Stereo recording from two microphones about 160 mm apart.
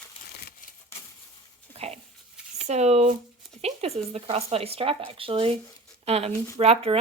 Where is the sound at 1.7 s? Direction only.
40° right (ahead or behind).